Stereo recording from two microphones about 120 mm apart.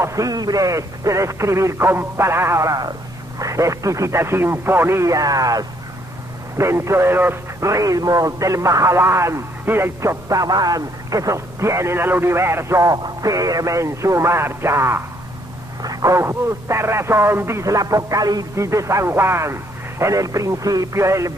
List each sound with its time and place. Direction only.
0.0 s speech: 25° right (ahead or behind)